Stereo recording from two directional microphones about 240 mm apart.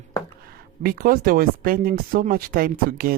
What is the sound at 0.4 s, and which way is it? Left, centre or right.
Speech, right.